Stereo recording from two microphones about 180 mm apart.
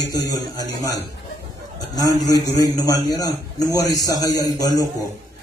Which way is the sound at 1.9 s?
20° left (ahead or behind).